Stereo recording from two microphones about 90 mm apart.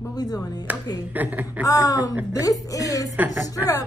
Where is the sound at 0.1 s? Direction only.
45° left (ahead or behind).